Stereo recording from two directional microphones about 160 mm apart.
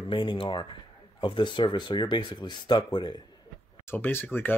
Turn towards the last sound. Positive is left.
turn(degrees=10)  # may be behind; listen again after turning